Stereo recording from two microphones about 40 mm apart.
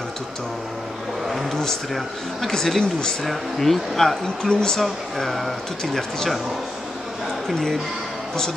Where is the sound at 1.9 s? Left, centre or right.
Centre.